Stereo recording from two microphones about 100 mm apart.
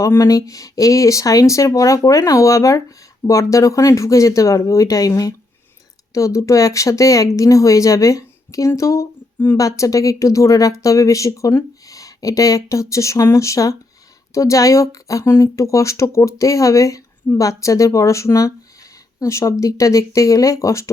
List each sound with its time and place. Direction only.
0.0 s a woman's voice: 30° left (ahead or behind)